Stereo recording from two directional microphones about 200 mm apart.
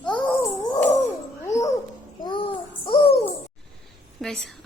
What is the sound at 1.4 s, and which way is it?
Babbling, 15° left (ahead or behind).